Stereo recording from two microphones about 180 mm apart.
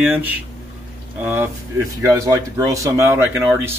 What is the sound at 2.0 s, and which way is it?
Speech, 20° right (ahead or behind).